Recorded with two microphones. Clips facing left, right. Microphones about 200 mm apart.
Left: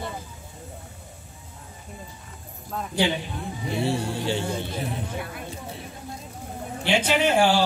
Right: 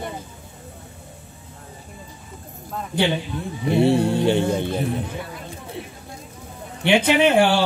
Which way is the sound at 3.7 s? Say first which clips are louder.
Right 9 dB; 60° right (ahead or behind).